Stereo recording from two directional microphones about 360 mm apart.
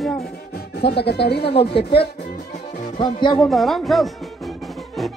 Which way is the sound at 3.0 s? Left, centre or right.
Centre.